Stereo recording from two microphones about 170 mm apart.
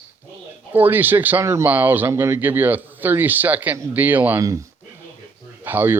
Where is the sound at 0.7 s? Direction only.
10° right (ahead or behind).